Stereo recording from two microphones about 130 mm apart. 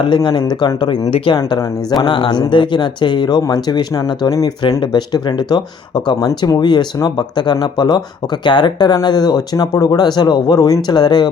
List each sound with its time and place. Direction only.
0.0 s speech: 35° left (ahead or behind)
1.4 s speech: 30° left (ahead or behind)
2.0 s speech: 40° left (ahead or behind)